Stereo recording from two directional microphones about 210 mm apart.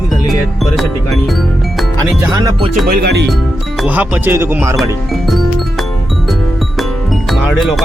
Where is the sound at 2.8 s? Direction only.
50° right (ahead or behind).